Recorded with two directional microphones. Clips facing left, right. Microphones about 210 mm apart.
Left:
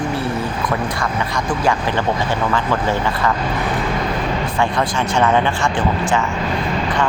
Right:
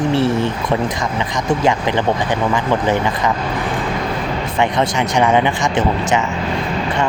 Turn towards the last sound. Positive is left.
turn(degrees=-15)  # may be behind; listen again after turning